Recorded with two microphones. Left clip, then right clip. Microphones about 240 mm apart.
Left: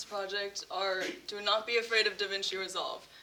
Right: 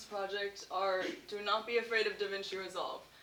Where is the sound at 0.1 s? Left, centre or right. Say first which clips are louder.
Left 2 dB; left.